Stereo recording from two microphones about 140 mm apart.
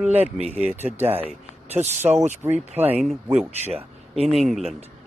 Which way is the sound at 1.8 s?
55° right (ahead or behind).